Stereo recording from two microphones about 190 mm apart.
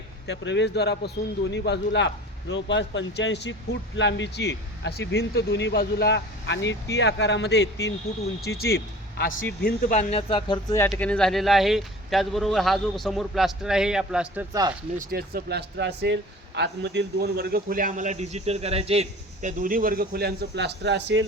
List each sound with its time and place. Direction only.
0.3 s a man's voice: 65° left (ahead or behind)
9.9 s speech: 35° left (ahead or behind)
10.8 s speech: 10° left (ahead or behind); by 14.4 s 5° right (ahead or behind)
14.9 s speech: 55° right (ahead or behind)